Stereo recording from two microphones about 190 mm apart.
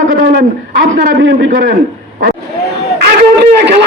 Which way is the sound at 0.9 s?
65° right (ahead or behind).